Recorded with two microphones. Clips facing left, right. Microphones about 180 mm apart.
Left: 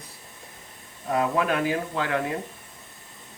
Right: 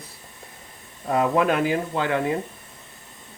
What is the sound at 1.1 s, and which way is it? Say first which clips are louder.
Speech: right 3 dB; 25° right (ahead or behind).